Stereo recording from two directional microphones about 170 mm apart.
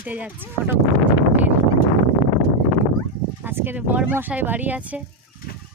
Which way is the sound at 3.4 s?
10° right (ahead or behind).